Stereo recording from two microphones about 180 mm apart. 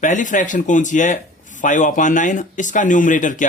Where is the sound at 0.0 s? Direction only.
45° left (ahead or behind).